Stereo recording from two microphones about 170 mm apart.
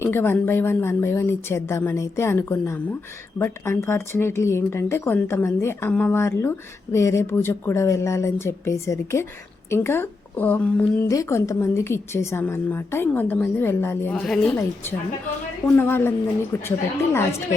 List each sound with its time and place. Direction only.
0.0 s speech: 15° left (ahead or behind)
15.6 s speech: 10° left (ahead or behind)